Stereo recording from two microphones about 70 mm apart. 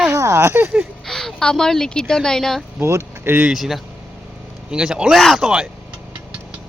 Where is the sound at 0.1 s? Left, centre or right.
Right.